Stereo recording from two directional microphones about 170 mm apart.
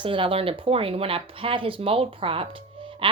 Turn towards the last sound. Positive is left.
turn(degrees=-30)  # may be behind; listen again after turning